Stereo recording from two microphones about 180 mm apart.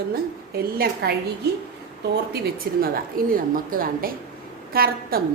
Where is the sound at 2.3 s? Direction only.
60° right (ahead or behind).